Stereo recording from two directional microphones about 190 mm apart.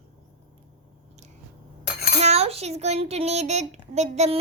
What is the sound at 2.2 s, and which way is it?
A child's voice, 35° right (ahead or behind).